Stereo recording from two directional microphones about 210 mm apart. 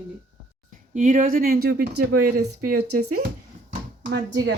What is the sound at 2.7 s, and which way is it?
Speech, 90° right.